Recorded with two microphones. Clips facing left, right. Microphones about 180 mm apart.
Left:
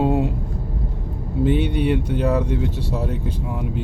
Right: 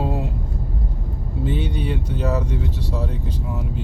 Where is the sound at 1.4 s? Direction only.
55° left (ahead or behind).